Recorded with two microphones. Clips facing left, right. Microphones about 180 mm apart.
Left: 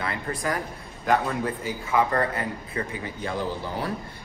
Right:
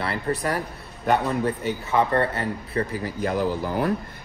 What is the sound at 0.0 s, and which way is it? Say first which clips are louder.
Speech: right 4 dB; 30° right (ahead or behind).